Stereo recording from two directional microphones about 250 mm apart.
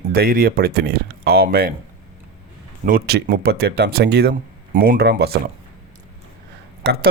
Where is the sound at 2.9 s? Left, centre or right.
Right.